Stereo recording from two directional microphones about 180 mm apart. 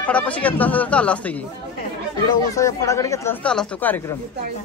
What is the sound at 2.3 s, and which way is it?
Speech, 20° left (ahead or behind).